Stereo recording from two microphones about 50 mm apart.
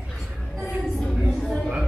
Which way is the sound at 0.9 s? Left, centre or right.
Centre.